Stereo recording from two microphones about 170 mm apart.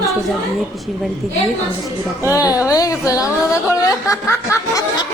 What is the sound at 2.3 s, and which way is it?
Speech, 20° left (ahead or behind).